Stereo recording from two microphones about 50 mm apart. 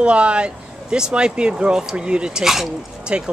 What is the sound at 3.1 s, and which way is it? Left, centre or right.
Speech, right.